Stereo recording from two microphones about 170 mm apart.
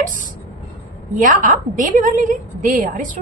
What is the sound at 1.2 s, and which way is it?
A woman's voice, 50° right (ahead or behind).